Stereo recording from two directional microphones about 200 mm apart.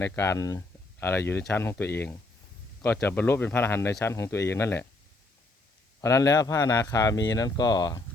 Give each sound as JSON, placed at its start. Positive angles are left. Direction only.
{"t": 0.0, "sound": "speech", "side_deg": 15}
{"t": 6.0, "sound": "speech", "side_deg": 15}